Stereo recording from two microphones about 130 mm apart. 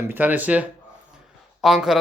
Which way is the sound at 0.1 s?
15° right (ahead or behind).